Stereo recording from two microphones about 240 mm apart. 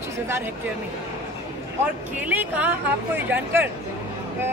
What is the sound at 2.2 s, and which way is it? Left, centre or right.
Speech, centre.